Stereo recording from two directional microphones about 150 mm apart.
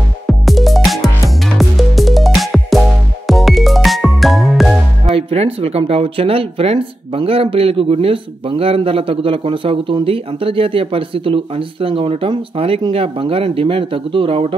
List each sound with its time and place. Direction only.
0.3 s music: centre (ahead or behind)
5.0 s speech: 40° right (ahead or behind)